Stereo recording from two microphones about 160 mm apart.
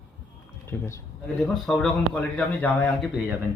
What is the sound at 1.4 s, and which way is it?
A man's voice, centre (ahead or behind).